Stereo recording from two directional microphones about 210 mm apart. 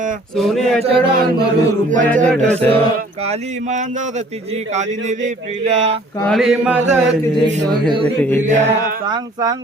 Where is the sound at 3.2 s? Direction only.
30° right (ahead or behind).